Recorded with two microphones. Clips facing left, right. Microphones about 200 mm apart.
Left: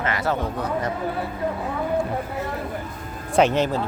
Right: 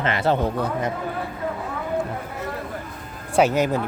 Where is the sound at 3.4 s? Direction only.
10° right (ahead or behind).